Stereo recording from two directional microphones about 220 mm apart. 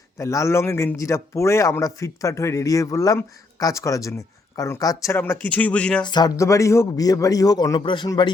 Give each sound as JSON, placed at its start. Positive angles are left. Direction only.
{"t": 0.2, "sound": "a man's voice", "side_deg": 15}
{"t": 6.1, "sound": "a man's voice", "side_deg": 20}